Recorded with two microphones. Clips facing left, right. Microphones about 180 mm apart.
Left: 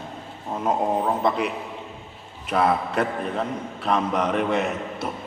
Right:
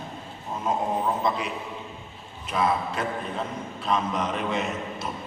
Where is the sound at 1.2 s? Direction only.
60° left (ahead or behind).